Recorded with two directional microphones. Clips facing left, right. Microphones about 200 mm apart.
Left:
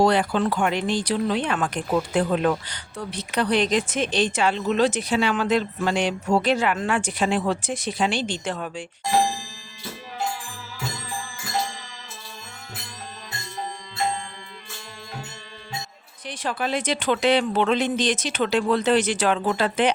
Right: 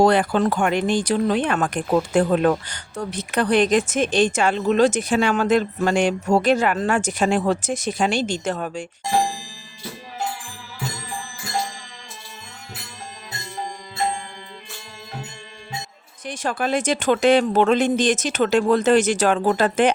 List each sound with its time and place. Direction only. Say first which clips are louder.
0.0 s speech: right 3 dB; 50° right (ahead or behind)
16.2 s speech: right 3 dB; 45° right (ahead or behind)